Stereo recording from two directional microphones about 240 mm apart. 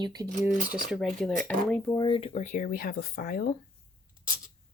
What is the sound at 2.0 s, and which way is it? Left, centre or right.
Speech, left.